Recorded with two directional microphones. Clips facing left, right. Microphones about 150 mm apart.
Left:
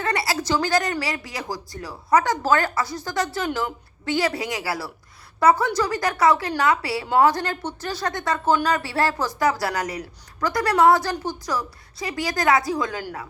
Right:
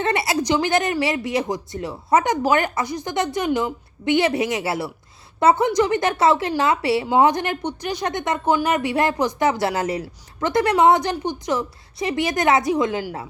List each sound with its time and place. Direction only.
0.0 s a woman's voice: 20° right (ahead or behind)